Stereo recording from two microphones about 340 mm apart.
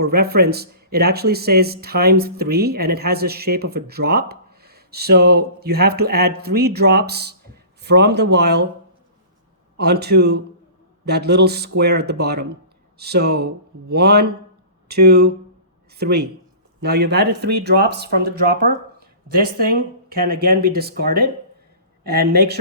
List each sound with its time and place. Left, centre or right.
0.0 s speech: right
9.7 s speech: right